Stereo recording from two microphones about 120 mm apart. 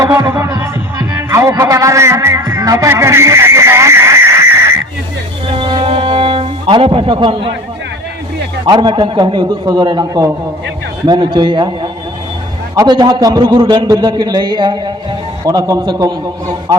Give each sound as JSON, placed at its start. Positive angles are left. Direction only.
{"t": 0.0, "sound": "music", "side_deg": -25}
{"t": 5.5, "sound": "music", "side_deg": -45}
{"t": 8.6, "sound": "a man's voice", "side_deg": -40}
{"t": 12.7, "sound": "a man's voice", "side_deg": -35}
{"t": 15.4, "sound": "a man's voice", "side_deg": -30}